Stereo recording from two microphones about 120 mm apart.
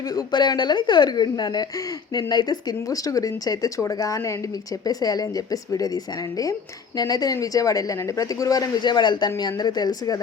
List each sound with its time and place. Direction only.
0.1 s speech: 35° left (ahead or behind)